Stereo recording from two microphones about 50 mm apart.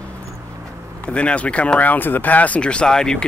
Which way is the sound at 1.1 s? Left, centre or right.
Left.